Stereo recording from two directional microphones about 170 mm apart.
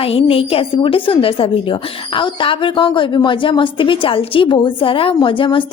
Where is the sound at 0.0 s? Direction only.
35° left (ahead or behind).